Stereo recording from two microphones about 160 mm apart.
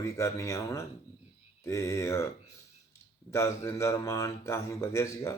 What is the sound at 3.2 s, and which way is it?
Speech, 15° left (ahead or behind).